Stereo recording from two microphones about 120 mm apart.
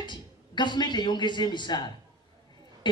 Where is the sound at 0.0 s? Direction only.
40° left (ahead or behind).